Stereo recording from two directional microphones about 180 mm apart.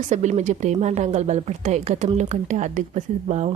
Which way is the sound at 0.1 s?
40° right (ahead or behind).